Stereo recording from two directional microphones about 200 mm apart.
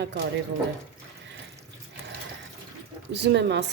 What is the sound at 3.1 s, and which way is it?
Speech, 60° right (ahead or behind).